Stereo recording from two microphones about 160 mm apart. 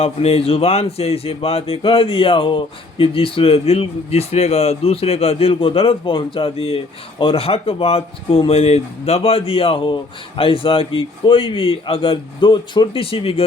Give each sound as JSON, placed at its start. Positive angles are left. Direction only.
{"t": 0.0, "sound": "speech", "side_deg": 40}